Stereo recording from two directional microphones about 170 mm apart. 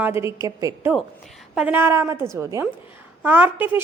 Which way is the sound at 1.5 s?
5° right (ahead or behind).